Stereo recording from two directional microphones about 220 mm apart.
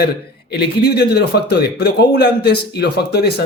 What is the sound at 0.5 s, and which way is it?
Speech, 45° left (ahead or behind).